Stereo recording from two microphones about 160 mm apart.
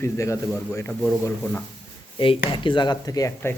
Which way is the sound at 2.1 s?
30° left (ahead or behind).